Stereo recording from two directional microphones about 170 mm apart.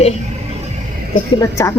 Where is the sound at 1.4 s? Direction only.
15° left (ahead or behind).